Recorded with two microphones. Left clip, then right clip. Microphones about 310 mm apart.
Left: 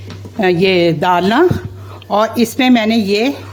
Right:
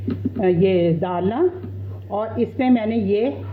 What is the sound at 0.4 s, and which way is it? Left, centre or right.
A woman's voice, left.